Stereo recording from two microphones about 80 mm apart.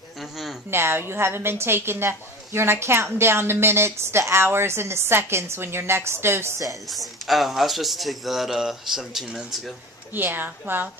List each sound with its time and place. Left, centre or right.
0.2 s a sound: centre
0.7 s a woman's voice: right
6.9 s a man's voice: centre
10.1 s a woman's voice: right